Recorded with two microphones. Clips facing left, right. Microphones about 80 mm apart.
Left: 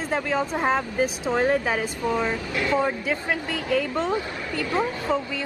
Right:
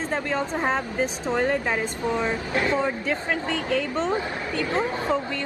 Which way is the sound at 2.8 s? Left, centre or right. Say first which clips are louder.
Left 1 dB; centre.